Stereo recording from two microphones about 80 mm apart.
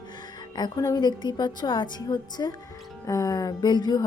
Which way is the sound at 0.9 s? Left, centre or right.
Left.